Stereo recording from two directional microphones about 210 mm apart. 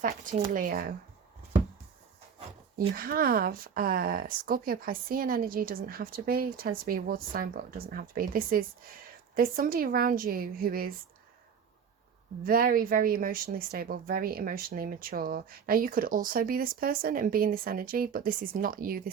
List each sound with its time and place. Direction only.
0.5 s speech: 40° right (ahead or behind)
2.9 s speech: 45° right (ahead or behind)
12.4 s speech: 40° right (ahead or behind)